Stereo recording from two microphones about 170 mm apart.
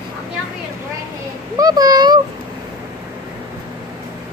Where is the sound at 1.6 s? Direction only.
20° right (ahead or behind).